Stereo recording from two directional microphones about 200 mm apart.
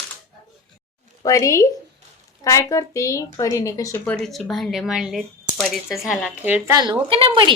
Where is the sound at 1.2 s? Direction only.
15° left (ahead or behind).